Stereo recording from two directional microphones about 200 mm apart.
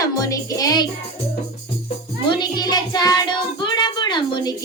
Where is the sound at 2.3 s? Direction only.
20° left (ahead or behind).